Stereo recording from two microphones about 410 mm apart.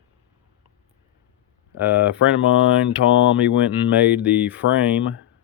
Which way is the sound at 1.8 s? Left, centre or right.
Centre.